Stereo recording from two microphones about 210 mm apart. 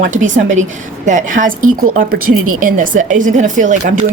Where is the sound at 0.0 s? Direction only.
35° right (ahead or behind).